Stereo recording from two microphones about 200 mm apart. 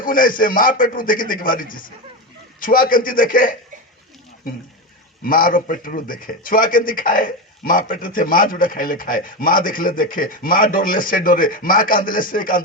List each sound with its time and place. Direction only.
0.0 s speech: 45° left (ahead or behind)
5.2 s speech: 45° left (ahead or behind)